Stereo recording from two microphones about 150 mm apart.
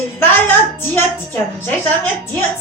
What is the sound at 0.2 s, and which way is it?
A woman's voice, 15° left (ahead or behind).